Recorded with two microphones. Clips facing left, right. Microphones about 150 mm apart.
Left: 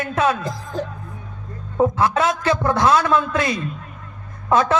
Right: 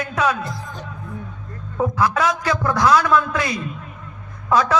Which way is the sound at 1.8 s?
25° left (ahead or behind).